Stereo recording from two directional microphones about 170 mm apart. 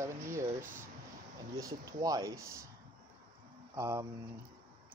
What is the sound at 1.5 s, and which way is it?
Speech, 20° right (ahead or behind).